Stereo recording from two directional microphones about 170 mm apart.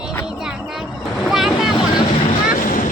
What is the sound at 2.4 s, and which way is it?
Boat, 50° left (ahead or behind).